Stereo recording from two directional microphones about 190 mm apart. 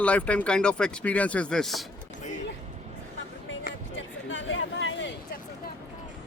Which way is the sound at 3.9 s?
85° left.